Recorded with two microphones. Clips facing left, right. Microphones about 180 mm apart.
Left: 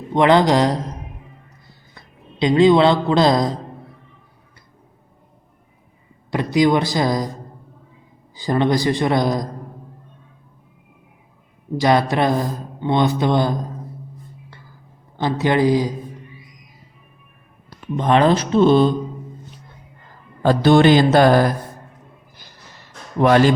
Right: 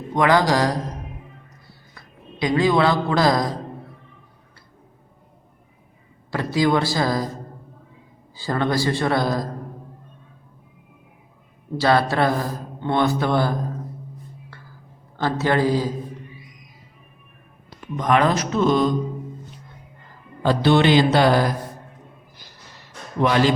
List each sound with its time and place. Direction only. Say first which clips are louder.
0.1 s speech: left 4 dB; 25° left (ahead or behind)
2.0 s a man's voice: left 4 dB; 25° left (ahead or behind)
6.3 s speech: left 3 dB; 20° left (ahead or behind)
8.4 s speech: left 4 dB; 20° left (ahead or behind)
11.8 s speech: left 2 dB; 15° left (ahead or behind)
15.2 s speech: left 3 dB; 15° left (ahead or behind)
17.9 s speech: left 4 dB; 30° left (ahead or behind)
20.4 s a man's voice: left 4 dB; 45° left (ahead or behind)
23.2 s a man's voice: left 5 dB; 50° left (ahead or behind)